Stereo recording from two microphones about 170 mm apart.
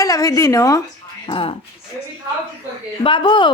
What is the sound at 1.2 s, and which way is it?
Speech, 30° left (ahead or behind).